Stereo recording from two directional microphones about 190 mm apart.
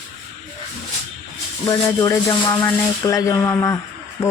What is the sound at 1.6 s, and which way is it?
Speech, 15° left (ahead or behind).